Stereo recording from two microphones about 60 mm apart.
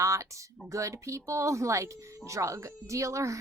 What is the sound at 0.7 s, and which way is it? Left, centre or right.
Speech, right.